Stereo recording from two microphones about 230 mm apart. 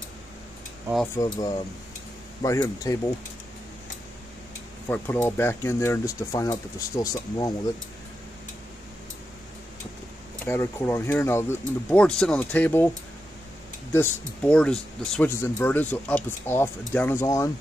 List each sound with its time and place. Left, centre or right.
1.1 s speech: centre
4.8 s speech: centre
10.4 s speech: centre
13.9 s speech: centre